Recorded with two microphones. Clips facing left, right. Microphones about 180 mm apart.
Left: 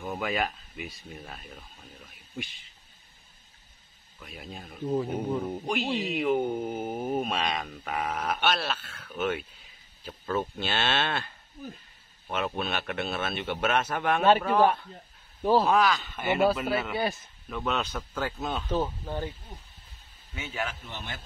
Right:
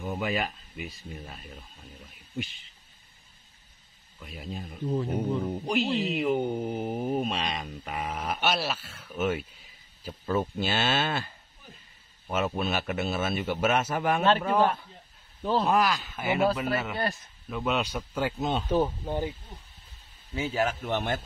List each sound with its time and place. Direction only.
0.0 s speech: centre (ahead or behind)
4.2 s speech: centre (ahead or behind)
12.3 s speech: 5° right (ahead or behind)
15.6 s speech: 5° right (ahead or behind)
20.3 s a man's voice: 35° right (ahead or behind)
20.8 s a man's voice: 55° right (ahead or behind)